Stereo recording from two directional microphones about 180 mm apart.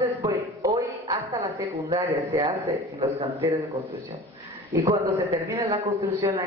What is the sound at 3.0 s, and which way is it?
Speech, 30° right (ahead or behind).